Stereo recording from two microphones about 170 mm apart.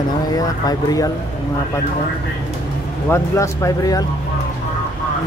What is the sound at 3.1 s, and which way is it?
Speech, 15° left (ahead or behind).